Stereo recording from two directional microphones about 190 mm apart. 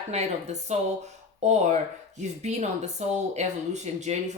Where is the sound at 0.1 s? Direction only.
35° right (ahead or behind).